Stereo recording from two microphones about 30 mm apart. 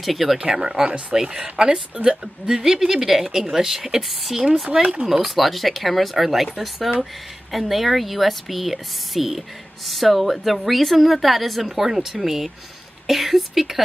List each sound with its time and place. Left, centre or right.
0.0 s a woman's voice: centre
0.5 s a woman's voice: centre
1.4 s speech: right
2.0 s a woman's voice: centre
5.0 s a woman's voice: centre
5.3 s a woman's voice: centre